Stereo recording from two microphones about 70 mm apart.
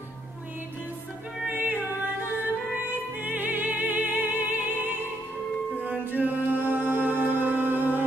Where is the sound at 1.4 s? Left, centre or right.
Right.